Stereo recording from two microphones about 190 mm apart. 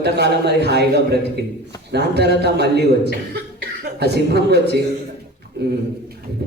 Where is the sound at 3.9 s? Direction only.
60° right (ahead or behind).